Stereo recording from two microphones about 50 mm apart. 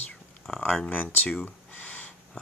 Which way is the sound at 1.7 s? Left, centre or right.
Left.